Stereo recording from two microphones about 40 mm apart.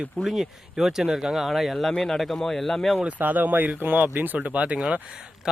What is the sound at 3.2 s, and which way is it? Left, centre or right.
Speech, right.